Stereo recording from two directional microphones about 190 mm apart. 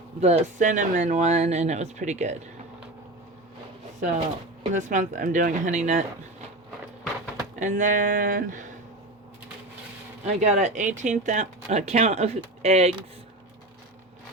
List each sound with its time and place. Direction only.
0.2 s speech: 35° right (ahead or behind)
4.7 s speech: 40° right (ahead or behind)
7.6 s a sound: 45° right (ahead or behind)
10.2 s speech: 40° right (ahead or behind)